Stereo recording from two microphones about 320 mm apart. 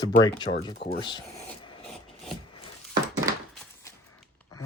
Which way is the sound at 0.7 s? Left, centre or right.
Left.